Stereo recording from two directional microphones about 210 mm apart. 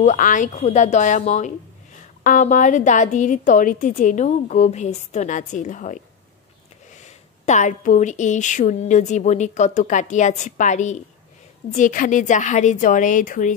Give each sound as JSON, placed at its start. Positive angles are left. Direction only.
{"t": 0.0, "sound": "speech", "side_deg": 35}
{"t": 7.1, "sound": "speech", "side_deg": 35}